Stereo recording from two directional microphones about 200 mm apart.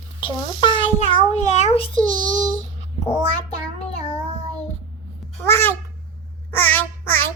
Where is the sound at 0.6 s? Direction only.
20° left (ahead or behind).